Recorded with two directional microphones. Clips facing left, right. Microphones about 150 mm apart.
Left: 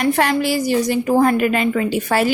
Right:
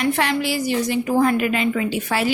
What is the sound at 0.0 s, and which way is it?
A woman's voice, 45° left (ahead or behind).